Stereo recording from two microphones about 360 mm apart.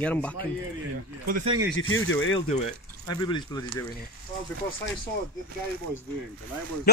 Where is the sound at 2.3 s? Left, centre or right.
Centre.